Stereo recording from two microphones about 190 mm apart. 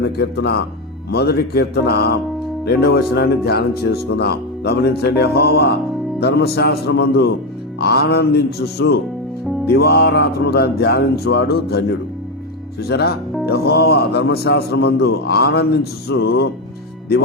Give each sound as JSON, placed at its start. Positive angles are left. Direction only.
{"t": 0.2, "sound": "a man's voice", "side_deg": 60}
{"t": 12.9, "sound": "a man's voice", "side_deg": 60}